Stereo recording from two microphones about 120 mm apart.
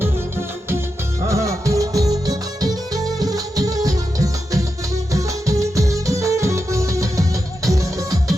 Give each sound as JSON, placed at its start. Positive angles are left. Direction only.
{"t": 1.3, "sound": "music", "side_deg": -25}